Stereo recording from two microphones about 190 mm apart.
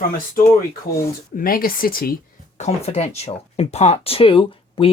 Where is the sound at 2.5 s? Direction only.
35° left (ahead or behind).